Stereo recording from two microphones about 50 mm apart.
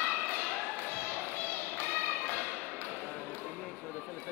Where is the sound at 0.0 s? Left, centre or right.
Left.